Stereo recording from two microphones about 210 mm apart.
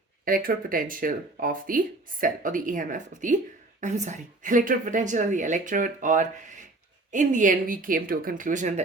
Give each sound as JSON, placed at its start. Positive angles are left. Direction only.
{"t": 0.3, "sound": "speech", "side_deg": -40}